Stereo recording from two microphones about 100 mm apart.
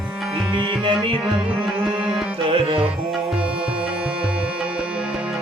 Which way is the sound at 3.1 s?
10° right (ahead or behind).